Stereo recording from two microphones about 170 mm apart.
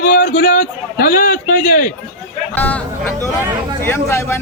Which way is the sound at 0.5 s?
55° left (ahead or behind).